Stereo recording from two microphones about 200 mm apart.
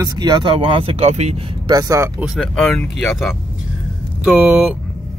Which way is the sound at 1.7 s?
15° right (ahead or behind).